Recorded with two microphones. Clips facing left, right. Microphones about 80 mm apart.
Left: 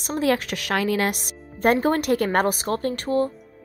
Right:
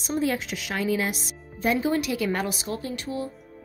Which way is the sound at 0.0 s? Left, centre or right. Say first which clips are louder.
Left 4 dB; left.